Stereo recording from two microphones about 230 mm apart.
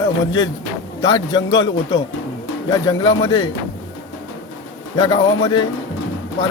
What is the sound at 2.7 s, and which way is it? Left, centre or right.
Speech, centre.